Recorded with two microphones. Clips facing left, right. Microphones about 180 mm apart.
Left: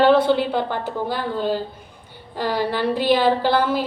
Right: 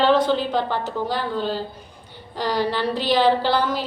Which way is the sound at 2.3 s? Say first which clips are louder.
Even; 10° left (ahead or behind).